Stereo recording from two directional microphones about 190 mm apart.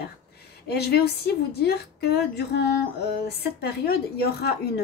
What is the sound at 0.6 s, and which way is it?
A woman's voice, 55° left (ahead or behind).